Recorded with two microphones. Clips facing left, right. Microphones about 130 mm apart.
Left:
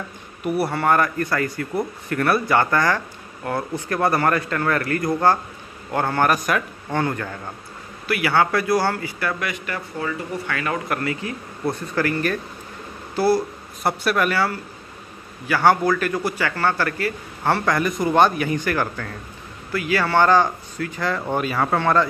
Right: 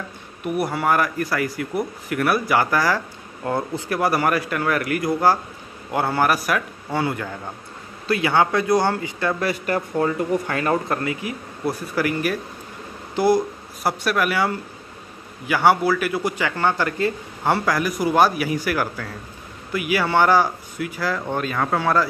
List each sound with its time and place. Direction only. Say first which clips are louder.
0.7 s speech: left 1 dB; 5° right (ahead or behind)
3.4 s speech: right 2 dB; 20° right (ahead or behind)
3.9 s speech: left 1 dB; 5° right (ahead or behind)
9.4 s speech: right 6 dB; 35° right (ahead or behind)
10.9 s speech: even; 20° right (ahead or behind)
13.8 s speech: left 1 dB; centre (ahead or behind)
14.3 s speech: even; 15° right (ahead or behind)
21.3 s speech: left 3 dB; 5° left (ahead or behind)